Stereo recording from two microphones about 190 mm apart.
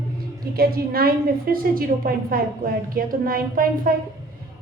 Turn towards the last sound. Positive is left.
turn(degrees=-50)  # may be behind; listen again after turning